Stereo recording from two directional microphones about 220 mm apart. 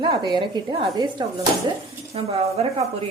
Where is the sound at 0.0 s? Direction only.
20° right (ahead or behind).